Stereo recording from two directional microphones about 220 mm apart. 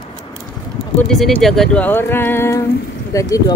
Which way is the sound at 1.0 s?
Centre (ahead or behind).